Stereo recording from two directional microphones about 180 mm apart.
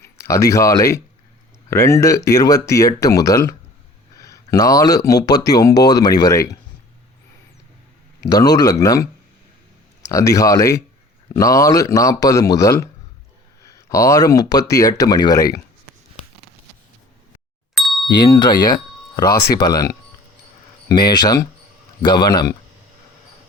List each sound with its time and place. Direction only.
0.2 s a man's voice: 15° left (ahead or behind)
8.2 s speech: 20° left (ahead or behind)
10.1 s a man's voice: 20° left (ahead or behind)
17.7 s ding: centre (ahead or behind)
18.2 s speech: 25° left (ahead or behind)